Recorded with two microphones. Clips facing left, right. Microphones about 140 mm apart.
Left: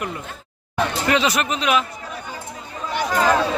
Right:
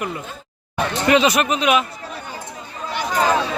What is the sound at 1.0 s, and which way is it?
Speech, 15° right (ahead or behind).